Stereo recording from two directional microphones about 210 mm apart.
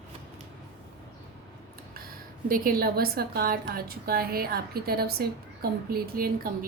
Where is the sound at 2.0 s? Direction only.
45° right (ahead or behind).